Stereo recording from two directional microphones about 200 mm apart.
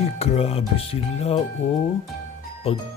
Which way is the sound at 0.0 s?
30° left (ahead or behind).